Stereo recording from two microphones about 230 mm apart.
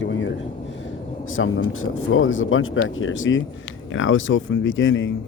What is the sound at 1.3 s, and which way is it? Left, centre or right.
Speech, left.